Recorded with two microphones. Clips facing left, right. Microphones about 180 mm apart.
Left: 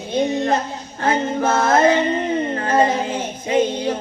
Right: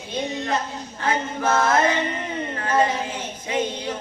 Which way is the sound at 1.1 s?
25° left (ahead or behind).